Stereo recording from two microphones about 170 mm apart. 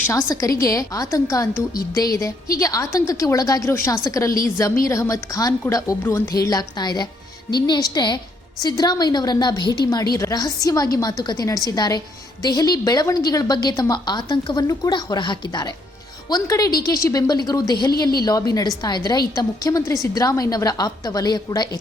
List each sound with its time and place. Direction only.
0.3 s a woman's voice: 20° left (ahead or behind)
2.6 s a woman's voice: 20° left (ahead or behind)